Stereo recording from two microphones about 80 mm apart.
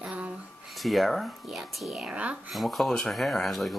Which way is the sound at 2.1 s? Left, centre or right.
Centre.